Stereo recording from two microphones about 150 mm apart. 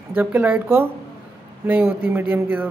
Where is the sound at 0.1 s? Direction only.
10° right (ahead or behind).